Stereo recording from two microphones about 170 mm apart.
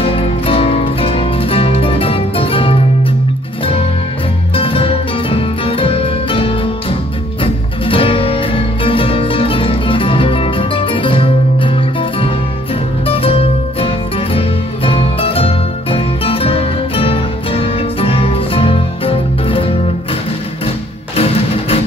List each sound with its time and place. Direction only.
0.0 s music: 35° left (ahead or behind)
4.6 s music: 30° left (ahead or behind)
21.2 s music: 35° left (ahead or behind)